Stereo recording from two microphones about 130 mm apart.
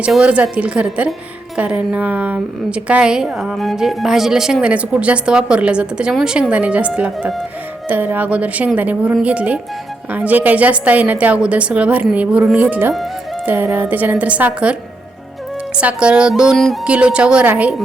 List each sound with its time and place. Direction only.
0.0 s a woman's voice: 10° right (ahead or behind)
15.8 s a woman's voice: 10° right (ahead or behind)